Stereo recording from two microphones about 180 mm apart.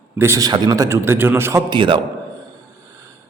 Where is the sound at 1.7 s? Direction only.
25° right (ahead or behind).